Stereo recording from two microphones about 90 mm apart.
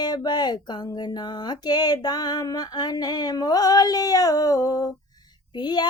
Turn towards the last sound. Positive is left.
turn(degrees=55)  # may be behind; listen again after turning